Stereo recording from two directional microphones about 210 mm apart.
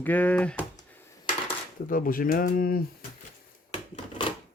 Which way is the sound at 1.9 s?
40° left (ahead or behind).